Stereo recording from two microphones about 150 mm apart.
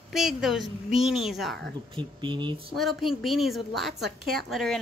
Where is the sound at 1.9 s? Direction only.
30° right (ahead or behind).